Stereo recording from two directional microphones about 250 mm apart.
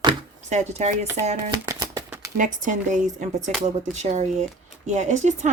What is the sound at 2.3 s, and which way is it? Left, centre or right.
Speech, right.